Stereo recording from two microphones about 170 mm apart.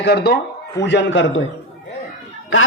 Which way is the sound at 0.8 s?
90° left.